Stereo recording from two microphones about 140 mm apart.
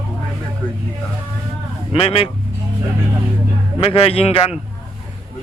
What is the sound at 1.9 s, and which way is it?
Speech, 45° left (ahead or behind).